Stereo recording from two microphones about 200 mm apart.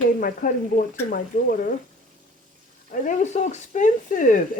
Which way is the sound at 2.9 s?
40° left (ahead or behind).